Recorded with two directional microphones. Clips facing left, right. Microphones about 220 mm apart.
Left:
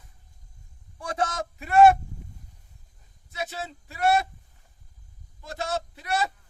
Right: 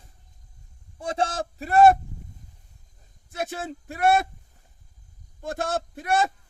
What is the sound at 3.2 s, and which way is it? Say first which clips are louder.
Speech: right 3 dB; 50° right (ahead or behind).